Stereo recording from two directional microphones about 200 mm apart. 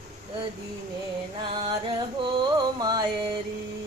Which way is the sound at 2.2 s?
20° right (ahead or behind).